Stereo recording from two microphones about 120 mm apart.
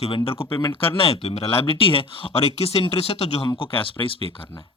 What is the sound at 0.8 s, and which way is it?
Speech, 50° left (ahead or behind).